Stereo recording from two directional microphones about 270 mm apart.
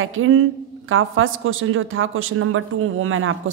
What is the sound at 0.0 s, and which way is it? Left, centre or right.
A woman's voice, right.